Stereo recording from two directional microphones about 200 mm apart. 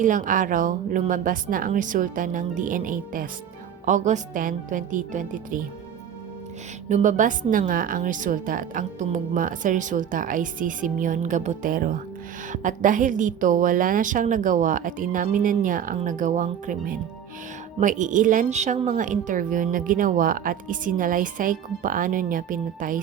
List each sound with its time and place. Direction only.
0.0 s speech: 40° right (ahead or behind)
6.8 s speech: 40° right (ahead or behind)